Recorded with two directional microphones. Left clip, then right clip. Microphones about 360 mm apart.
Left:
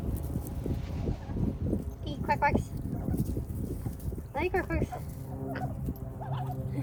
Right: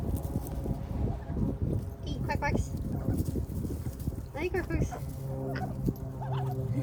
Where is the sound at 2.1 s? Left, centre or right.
Centre.